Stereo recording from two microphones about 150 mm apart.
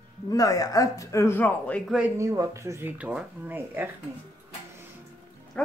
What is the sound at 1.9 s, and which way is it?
Speech, 5° right (ahead or behind).